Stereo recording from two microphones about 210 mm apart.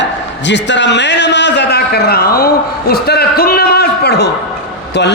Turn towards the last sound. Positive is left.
turn(degrees=55)  # may be behind; listen again after turning